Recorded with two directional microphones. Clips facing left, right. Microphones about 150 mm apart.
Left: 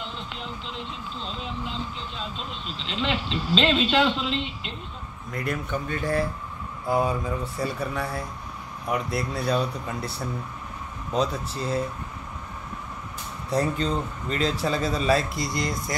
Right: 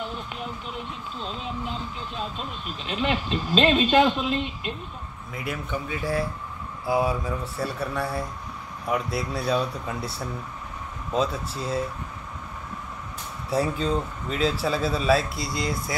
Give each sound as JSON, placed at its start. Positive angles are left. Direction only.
{"t": 3.0, "sound": "speech", "side_deg": -15}
{"t": 5.3, "sound": "a man's voice", "side_deg": -5}
{"t": 13.5, "sound": "a man's voice", "side_deg": -5}